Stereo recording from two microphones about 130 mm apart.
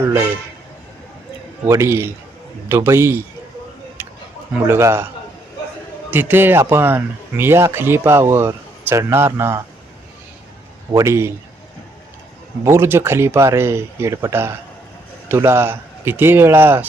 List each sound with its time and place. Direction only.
1.6 s a man's voice: 20° right (ahead or behind)
4.0 s a sound: 15° right (ahead or behind)
4.5 s speech: 20° right (ahead or behind)
6.1 s speech: 15° right (ahead or behind)
10.9 s speech: 20° right (ahead or behind)
12.6 s a man's voice: 20° right (ahead or behind)